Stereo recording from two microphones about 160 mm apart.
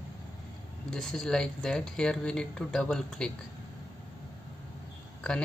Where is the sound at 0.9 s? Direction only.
5° left (ahead or behind).